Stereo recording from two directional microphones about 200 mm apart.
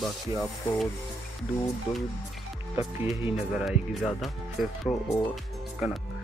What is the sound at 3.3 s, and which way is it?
Speech, centre (ahead or behind).